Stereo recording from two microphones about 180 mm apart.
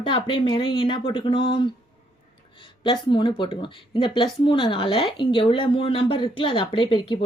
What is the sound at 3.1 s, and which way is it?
Speech, 25° left (ahead or behind).